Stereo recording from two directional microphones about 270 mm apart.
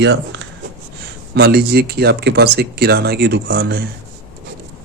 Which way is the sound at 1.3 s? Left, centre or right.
Right.